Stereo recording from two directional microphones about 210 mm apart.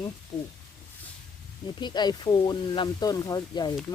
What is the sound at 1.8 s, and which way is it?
Speech, 20° left (ahead or behind).